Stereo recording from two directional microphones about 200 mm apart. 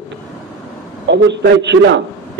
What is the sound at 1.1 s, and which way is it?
Speech, 60° right (ahead or behind).